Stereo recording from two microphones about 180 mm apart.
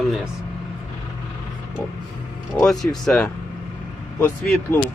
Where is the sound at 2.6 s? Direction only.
5° left (ahead or behind).